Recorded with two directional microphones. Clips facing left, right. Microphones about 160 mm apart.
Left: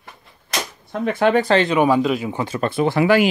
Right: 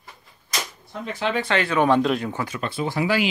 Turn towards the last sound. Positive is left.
turn(degrees=60)  # may be behind; listen again after turning